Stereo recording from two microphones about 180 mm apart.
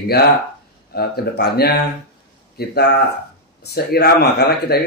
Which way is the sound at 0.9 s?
60° left (ahead or behind).